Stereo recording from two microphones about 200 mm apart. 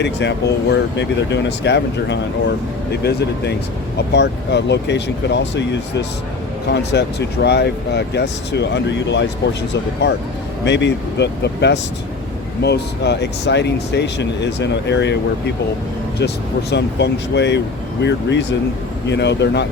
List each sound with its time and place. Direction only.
0.0 s speech: 60° left (ahead or behind)
10.6 s speech: 60° left (ahead or behind)